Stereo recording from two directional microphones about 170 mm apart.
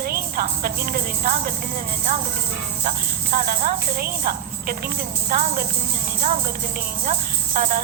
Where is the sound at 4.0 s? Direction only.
60° right (ahead or behind).